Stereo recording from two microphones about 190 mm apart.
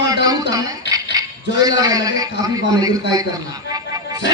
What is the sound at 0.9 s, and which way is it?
Rattle, 20° right (ahead or behind).